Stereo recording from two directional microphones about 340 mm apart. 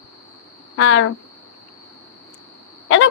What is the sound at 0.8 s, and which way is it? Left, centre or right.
Speech, left.